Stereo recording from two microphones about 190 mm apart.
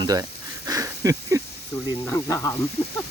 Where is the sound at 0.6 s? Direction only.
15° right (ahead or behind).